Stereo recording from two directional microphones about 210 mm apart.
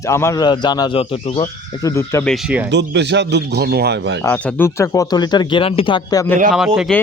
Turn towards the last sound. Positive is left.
turn(degrees=0)  # may be behind; listen again after turning